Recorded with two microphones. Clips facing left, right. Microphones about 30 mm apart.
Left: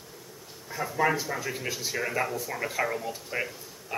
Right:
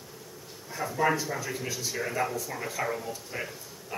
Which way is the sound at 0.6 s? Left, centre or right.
Centre.